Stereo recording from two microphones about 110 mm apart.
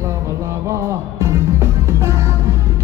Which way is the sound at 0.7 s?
25° right (ahead or behind).